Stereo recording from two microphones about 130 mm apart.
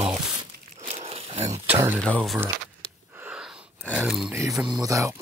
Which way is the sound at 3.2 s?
10° right (ahead or behind).